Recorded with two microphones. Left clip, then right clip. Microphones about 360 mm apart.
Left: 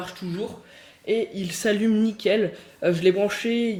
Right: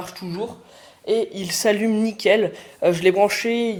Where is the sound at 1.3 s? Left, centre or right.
Centre.